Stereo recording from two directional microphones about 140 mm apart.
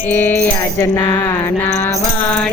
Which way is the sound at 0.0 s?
15° left (ahead or behind).